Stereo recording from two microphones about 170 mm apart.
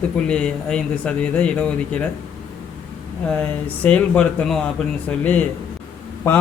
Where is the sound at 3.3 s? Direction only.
5° left (ahead or behind).